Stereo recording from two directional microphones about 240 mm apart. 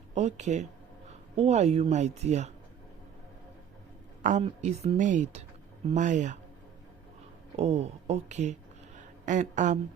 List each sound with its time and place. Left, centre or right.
0.1 s a woman's voice: right
4.2 s a woman's voice: right
7.5 s a woman's voice: right
9.0 s a sound: right